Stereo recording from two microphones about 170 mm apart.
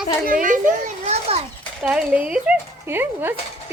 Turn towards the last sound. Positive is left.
turn(degrees=-10)  # may be behind; listen again after turning